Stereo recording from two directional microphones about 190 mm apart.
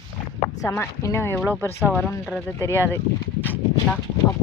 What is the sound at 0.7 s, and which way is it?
Speech, 15° left (ahead or behind).